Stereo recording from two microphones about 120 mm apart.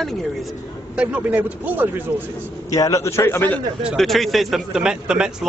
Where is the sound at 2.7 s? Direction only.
25° left (ahead or behind).